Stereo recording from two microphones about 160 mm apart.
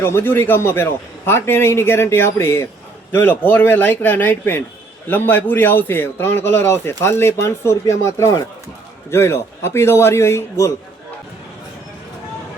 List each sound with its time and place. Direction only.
0.0 s a man's voice: 15° left (ahead or behind)